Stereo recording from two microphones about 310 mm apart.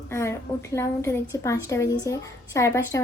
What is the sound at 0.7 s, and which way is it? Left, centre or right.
A woman's voice, centre.